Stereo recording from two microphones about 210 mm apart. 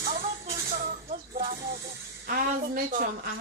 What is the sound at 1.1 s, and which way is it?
Music, 45° right (ahead or behind).